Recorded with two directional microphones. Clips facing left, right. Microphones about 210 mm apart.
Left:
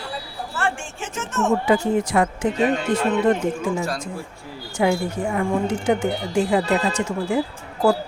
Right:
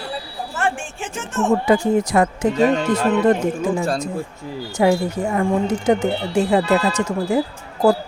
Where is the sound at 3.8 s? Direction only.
30° right (ahead or behind).